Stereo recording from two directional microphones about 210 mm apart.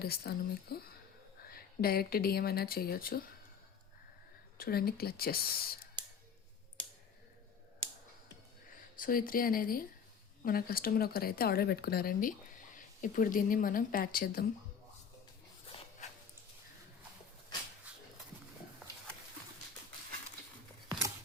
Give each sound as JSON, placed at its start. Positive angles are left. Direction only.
{"t": 0.0, "sound": "speech", "side_deg": 50}
{"t": 4.5, "sound": "speech", "side_deg": 45}
{"t": 9.0, "sound": "speech", "side_deg": 40}
{"t": 15.7, "sound": "dog", "side_deg": 25}